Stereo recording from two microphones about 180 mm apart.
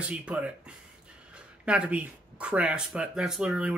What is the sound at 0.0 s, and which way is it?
Speech, 5° right (ahead or behind).